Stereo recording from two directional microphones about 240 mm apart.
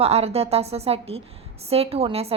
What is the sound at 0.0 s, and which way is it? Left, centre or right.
A woman's voice, right.